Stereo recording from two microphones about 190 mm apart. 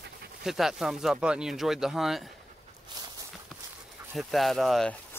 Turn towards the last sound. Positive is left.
turn(degrees=0)  # may be behind; listen again after turning